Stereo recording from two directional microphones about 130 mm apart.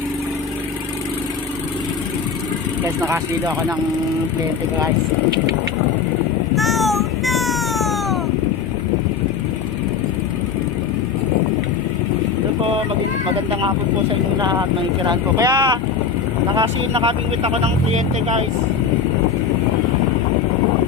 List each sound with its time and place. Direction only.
6.6 s a sound: centre (ahead or behind)
13.5 s speech: 40° right (ahead or behind)
15.0 s speech: 35° right (ahead or behind)
16.6 s speech: 45° right (ahead or behind)